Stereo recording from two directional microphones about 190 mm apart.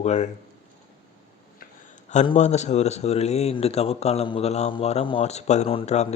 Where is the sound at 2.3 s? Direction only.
35° left (ahead or behind).